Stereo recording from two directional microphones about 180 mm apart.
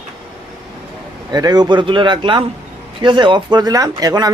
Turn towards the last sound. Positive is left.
turn(degrees=-20)  # may be behind; listen again after turning